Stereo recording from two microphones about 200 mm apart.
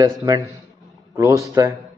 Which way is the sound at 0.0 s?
20° right (ahead or behind).